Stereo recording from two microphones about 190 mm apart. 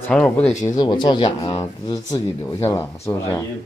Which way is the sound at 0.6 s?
20° left (ahead or behind).